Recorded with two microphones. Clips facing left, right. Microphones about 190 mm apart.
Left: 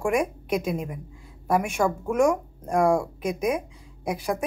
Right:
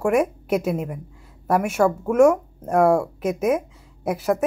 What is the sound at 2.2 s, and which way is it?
Speech, 10° left (ahead or behind).